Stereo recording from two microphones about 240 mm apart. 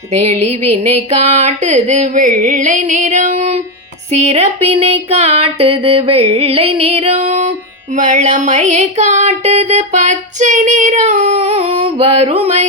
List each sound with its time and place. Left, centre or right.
0.2 s music: right
1.2 s a sound: right
4.1 s music: right